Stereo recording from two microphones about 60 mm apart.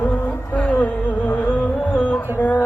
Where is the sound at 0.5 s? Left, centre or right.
Left.